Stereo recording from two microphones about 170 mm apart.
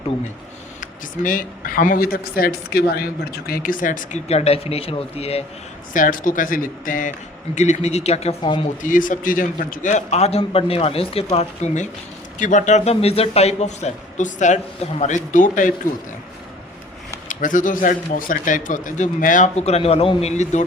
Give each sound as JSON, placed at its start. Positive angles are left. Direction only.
{"t": 0.8, "sound": "a man's voice", "side_deg": 50}
{"t": 5.9, "sound": "a man's voice", "side_deg": 50}
{"t": 7.5, "sound": "a man's voice", "side_deg": 40}
{"t": 8.6, "sound": "a man's voice", "side_deg": 50}
{"t": 17.2, "sound": "a man's voice", "side_deg": 50}